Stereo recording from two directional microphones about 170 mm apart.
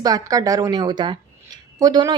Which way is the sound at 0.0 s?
20° right (ahead or behind).